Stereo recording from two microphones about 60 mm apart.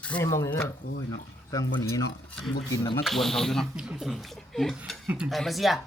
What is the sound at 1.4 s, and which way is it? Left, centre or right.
Speech, left.